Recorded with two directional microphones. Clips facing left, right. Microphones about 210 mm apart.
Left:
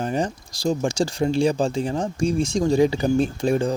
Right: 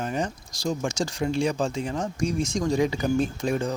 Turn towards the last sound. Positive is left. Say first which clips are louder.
# left 5 dB
turn(degrees=30)  # may be behind; listen again after turning